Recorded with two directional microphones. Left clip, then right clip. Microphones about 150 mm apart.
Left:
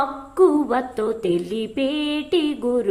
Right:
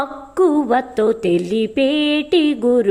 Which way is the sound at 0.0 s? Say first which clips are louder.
Even; 30° right (ahead or behind).